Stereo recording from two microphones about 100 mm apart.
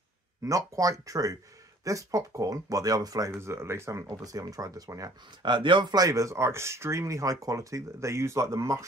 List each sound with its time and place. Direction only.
0.4 s speech: 35° right (ahead or behind)
5.4 s speech: 50° right (ahead or behind); by 8.8 s 30° right (ahead or behind)